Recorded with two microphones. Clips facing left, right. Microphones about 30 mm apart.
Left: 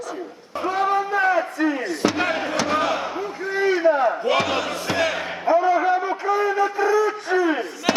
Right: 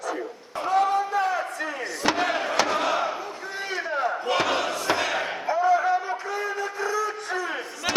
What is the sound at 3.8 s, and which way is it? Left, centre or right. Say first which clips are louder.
A man's voice: left 5 dB; centre.